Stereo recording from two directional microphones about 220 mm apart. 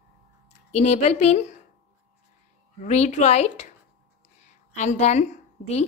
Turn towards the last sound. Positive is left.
turn(degrees=30)  # may be behind; listen again after turning